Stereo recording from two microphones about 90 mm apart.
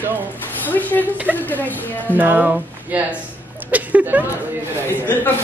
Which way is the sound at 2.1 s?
20° right (ahead or behind).